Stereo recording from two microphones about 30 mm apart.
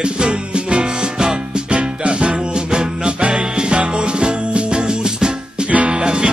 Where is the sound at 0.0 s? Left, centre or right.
Right.